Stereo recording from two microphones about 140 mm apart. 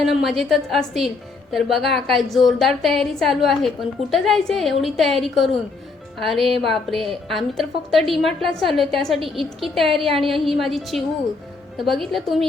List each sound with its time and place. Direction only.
0.0 s a woman's voice: centre (ahead or behind)